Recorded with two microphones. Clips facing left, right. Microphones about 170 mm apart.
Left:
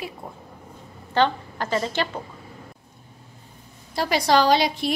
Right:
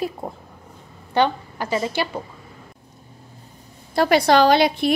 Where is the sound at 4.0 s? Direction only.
60° right (ahead or behind).